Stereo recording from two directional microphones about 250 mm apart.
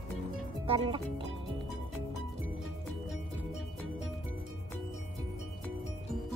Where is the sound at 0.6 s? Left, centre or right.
Right.